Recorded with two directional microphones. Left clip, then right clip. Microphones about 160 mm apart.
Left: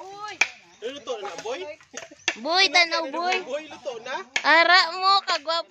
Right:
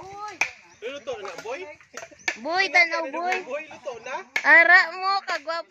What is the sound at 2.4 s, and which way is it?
Speech, 5° left (ahead or behind).